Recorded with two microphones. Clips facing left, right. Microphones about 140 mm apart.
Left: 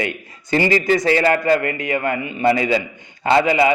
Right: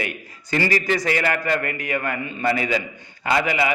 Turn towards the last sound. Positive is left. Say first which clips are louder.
# left 6 dB
turn(degrees=25)  # may be behind; listen again after turning